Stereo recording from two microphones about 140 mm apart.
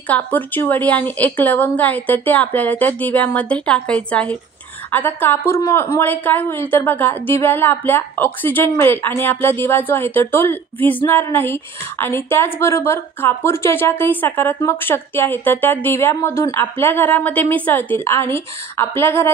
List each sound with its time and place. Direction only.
0.1 s a woman's voice: 10° left (ahead or behind)